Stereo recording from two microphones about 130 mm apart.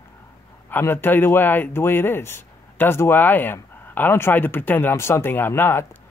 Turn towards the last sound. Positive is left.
turn(degrees=15)  # may be behind; listen again after turning